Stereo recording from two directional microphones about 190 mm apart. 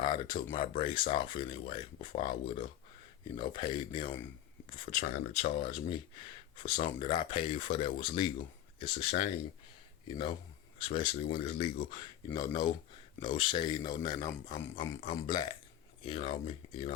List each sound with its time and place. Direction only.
0.0 s a sound: 25° left (ahead or behind)
0.5 s speech: 25° left (ahead or behind)
4.9 s speech: 40° left (ahead or behind)
5.5 s speech: 25° left (ahead or behind)
10.8 s speech: 25° left (ahead or behind)